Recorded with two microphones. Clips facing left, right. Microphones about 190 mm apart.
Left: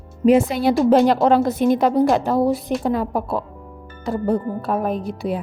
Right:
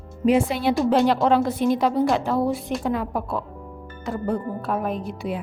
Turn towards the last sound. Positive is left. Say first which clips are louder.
# left 4 dB
turn(degrees=35)  # may be behind; listen again after turning